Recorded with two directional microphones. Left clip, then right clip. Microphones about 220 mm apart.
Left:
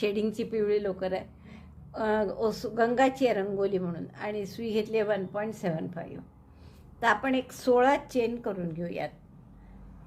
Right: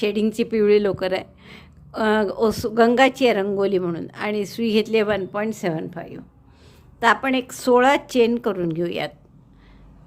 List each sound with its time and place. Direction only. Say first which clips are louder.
0.0 s a woman's voice: right 7 dB; 25° right (ahead or behind)